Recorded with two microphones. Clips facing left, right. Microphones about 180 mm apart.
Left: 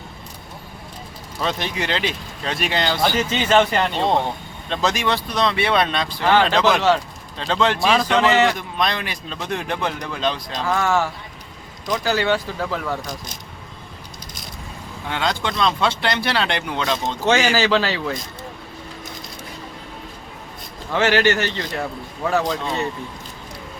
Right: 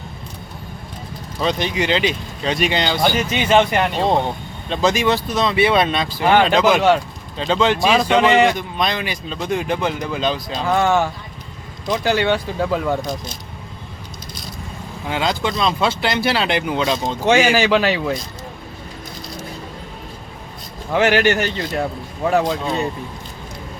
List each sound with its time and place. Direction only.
1.4 s speech: centre (ahead or behind)
3.3 s speech: 15° right (ahead or behind)
8.2 s speech: 20° right (ahead or behind)
8.5 s speech: centre (ahead or behind)
10.7 s speech: 20° right (ahead or behind)
15.1 s speech: 5° right (ahead or behind)
20.9 s speech: 15° right (ahead or behind)